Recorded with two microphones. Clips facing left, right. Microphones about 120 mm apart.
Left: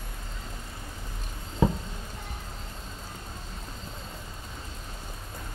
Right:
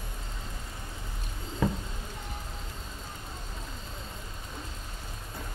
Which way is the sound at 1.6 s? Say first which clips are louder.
Left 4 dB; 15° left (ahead or behind).